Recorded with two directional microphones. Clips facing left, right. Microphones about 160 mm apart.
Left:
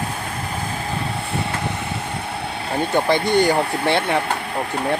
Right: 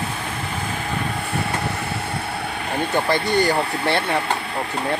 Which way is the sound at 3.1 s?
15° left (ahead or behind).